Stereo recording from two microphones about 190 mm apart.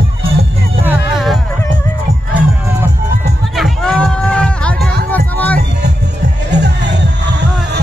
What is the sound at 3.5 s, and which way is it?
Run, centre (ahead or behind).